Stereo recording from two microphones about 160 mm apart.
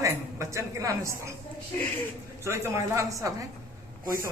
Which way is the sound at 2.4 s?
15° right (ahead or behind).